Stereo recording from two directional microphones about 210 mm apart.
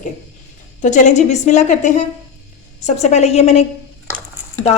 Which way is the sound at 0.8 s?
35° left (ahead or behind).